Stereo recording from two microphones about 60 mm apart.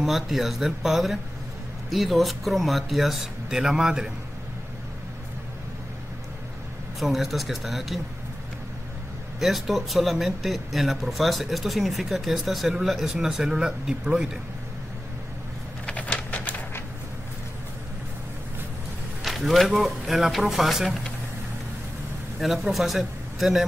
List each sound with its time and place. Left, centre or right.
0.0 s a man's voice: centre
7.0 s speech: centre
9.4 s speech: centre
15.9 s a sound: left
19.2 s speech: centre
22.4 s a man's voice: centre